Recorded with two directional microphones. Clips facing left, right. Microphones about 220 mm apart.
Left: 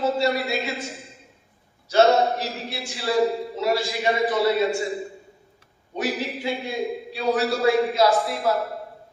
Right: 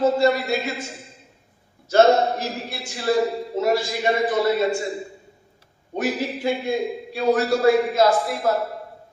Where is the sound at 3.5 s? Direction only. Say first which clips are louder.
Right 5 dB; 50° right (ahead or behind).